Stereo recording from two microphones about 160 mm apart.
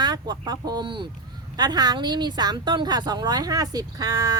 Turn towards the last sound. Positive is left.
turn(degrees=-20)  # may be behind; listen again after turning